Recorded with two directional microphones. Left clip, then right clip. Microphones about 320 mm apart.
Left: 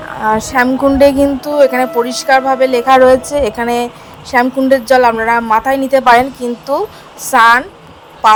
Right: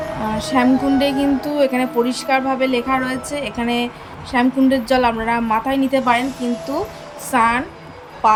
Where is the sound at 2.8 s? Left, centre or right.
Left.